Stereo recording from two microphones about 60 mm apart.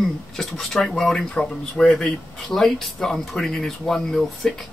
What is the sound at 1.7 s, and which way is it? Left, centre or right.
Speech, centre.